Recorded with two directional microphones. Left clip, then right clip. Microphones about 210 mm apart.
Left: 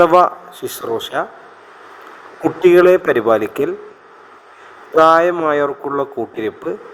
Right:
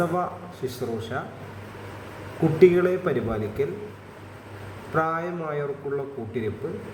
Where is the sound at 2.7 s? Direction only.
35° left (ahead or behind).